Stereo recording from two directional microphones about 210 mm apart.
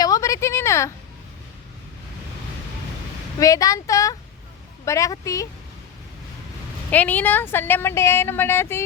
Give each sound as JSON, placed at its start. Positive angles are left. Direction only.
{"t": 0.0, "sound": "a sound", "side_deg": 15}
{"t": 3.4, "sound": "speech", "side_deg": 15}
{"t": 6.9, "sound": "speech", "side_deg": 10}